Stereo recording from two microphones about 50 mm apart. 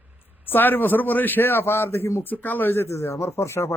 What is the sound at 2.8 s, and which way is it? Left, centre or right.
Speech, left.